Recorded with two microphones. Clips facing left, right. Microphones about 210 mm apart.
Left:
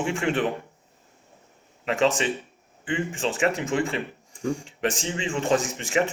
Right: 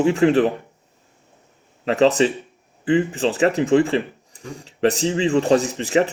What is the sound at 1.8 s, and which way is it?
A man's voice, 35° right (ahead or behind).